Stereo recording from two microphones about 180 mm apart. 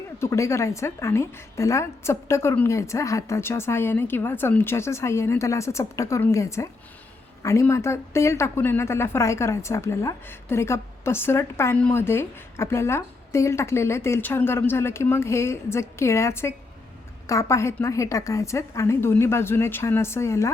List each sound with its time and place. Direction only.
0.2 s speech: 15° left (ahead or behind)